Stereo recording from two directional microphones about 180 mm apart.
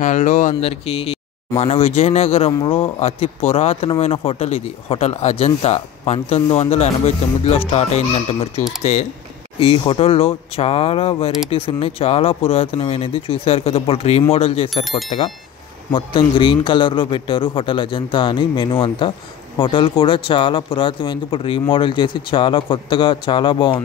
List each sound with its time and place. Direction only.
0.0 s speech: 45° left (ahead or behind)
0.6 s speech: 30° left (ahead or behind)